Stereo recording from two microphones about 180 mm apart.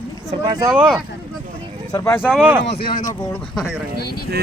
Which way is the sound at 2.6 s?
60° left (ahead or behind).